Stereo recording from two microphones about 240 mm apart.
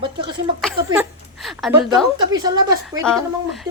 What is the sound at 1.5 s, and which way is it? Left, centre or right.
Speech, centre.